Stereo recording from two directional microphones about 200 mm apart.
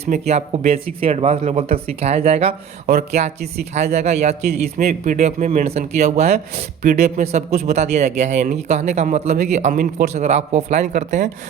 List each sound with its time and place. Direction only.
0.0 s speech: 35° right (ahead or behind)